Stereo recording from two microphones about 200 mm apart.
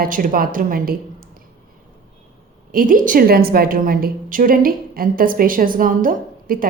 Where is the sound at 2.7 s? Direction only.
45° right (ahead or behind).